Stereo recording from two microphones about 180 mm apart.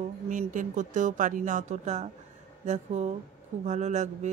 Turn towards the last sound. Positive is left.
turn(degrees=-40)  # may be behind; listen again after turning